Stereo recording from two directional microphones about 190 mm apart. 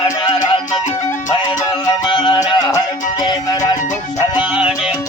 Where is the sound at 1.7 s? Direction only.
25° left (ahead or behind).